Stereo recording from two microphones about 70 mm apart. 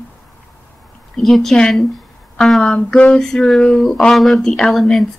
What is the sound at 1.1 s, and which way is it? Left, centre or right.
Speech, centre.